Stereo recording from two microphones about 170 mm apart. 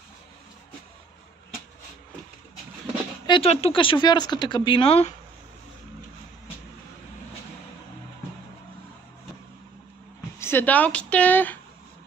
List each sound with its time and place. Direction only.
3.3 s speech: 35° left (ahead or behind)
10.4 s speech: 10° left (ahead or behind)